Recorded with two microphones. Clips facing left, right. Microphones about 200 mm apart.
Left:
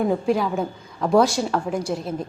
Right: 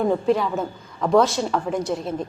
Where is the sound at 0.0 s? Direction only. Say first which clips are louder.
Right 1 dB; 5° left (ahead or behind).